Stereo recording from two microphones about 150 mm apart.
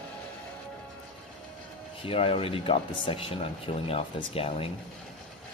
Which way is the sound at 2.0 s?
40° left (ahead or behind).